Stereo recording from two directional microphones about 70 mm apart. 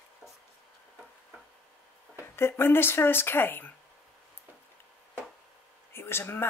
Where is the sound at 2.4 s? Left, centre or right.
Left.